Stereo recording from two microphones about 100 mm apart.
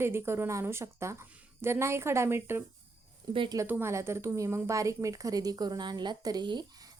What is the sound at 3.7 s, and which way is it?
A woman's voice, 25° right (ahead or behind).